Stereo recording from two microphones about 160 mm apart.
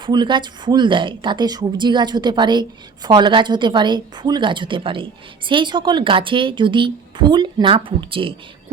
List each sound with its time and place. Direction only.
0.0 s a woman's voice: 30° right (ahead or behind)